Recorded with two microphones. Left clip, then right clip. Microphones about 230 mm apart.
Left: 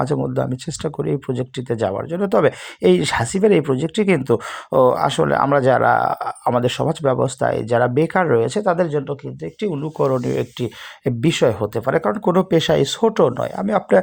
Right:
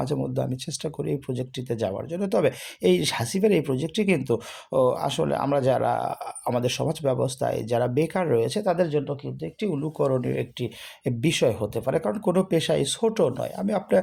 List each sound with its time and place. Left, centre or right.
0.0 s speech: left